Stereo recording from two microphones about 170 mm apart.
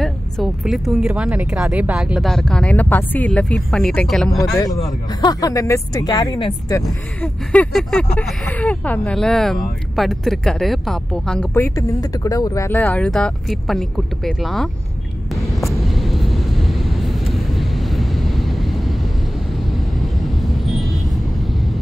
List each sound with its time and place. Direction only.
0.0 s speech: centre (ahead or behind)
4.3 s speech: 20° left (ahead or behind)
6.8 s speech: 5° left (ahead or behind)
11.5 s speech: 15° left (ahead or behind); by 14.7 s centre (ahead or behind)
15.6 s vehicle: centre (ahead or behind)